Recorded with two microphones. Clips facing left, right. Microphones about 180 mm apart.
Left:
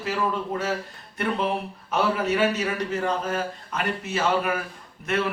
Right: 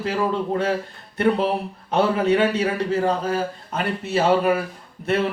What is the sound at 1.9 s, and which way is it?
Speech, 30° right (ahead or behind).